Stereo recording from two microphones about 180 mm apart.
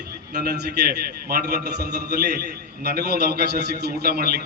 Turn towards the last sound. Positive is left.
turn(degrees=-60)  # may be behind; listen again after turning